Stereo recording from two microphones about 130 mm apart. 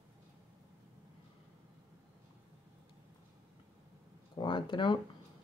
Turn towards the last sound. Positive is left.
turn(degrees=35)  # may be behind; listen again after turning